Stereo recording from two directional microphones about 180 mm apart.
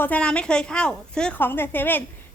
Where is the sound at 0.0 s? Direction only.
5° left (ahead or behind).